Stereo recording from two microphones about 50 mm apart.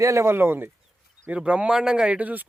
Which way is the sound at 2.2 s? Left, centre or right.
Right.